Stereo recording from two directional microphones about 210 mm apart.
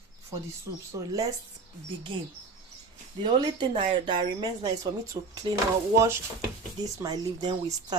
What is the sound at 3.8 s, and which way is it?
A woman's voice, 25° right (ahead or behind).